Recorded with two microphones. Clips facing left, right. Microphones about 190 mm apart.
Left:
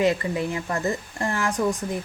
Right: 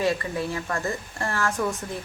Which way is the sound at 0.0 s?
20° left (ahead or behind).